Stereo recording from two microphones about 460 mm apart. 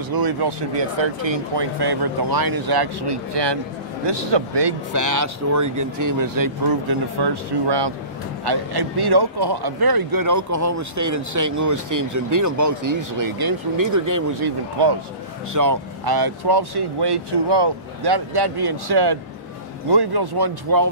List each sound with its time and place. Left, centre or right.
0.1 s speech: right
4.9 s speech: right
14.8 s speech: right
15.5 s speech: right